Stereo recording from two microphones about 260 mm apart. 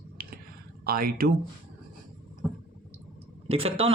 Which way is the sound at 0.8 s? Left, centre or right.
Right.